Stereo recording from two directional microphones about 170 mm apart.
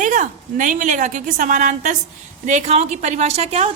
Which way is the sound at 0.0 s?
50° right (ahead or behind).